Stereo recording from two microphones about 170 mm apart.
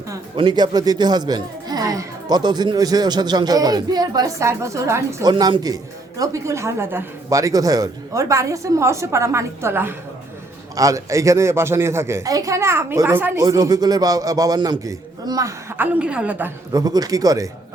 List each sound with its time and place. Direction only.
0.3 s speech: 25° right (ahead or behind)
13.4 s speech: 25° right (ahead or behind)
16.0 s speech: 5° right (ahead or behind)
16.7 s speech: 20° right (ahead or behind)